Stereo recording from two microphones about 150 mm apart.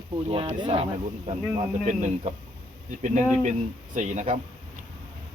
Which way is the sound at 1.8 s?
55° right (ahead or behind).